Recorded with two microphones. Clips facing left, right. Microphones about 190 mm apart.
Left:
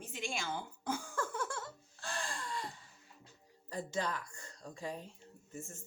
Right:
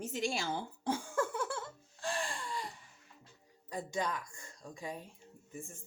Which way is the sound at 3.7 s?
15° right (ahead or behind).